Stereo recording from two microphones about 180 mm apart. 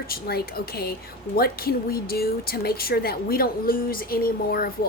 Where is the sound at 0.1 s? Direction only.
60° left (ahead or behind).